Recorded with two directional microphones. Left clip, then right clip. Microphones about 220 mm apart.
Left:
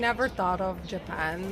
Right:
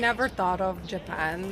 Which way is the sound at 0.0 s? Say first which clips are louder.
Right 1 dB; 20° right (ahead or behind).